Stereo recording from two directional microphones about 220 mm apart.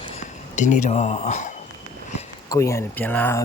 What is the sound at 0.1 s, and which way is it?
Speech, 35° left (ahead or behind).